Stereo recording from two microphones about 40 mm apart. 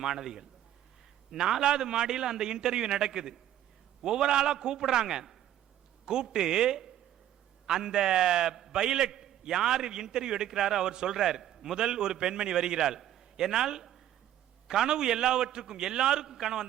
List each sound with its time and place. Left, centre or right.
0.0 s a man's voice: centre
13.0 s a sound: centre
13.3 s a man's voice: centre